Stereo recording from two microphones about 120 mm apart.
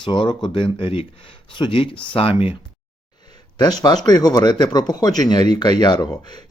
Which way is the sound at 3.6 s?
35° left (ahead or behind).